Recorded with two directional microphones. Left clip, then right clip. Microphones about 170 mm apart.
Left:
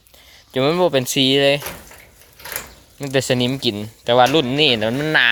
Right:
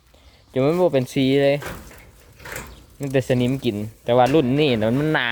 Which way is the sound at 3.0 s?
Centre (ahead or behind).